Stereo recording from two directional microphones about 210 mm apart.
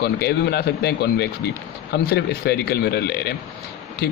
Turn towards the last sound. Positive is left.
turn(degrees=50)  # may be behind; listen again after turning